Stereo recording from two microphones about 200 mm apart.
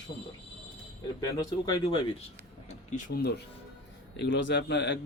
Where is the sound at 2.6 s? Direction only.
35° left (ahead or behind).